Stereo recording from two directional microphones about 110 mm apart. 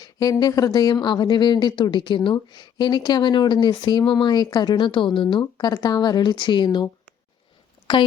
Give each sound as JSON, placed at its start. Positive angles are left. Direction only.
{"t": 0.0, "sound": "a woman's voice", "side_deg": 35}
{"t": 7.9, "sound": "speech", "side_deg": 50}